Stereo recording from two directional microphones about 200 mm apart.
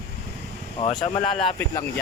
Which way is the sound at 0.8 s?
30° left (ahead or behind).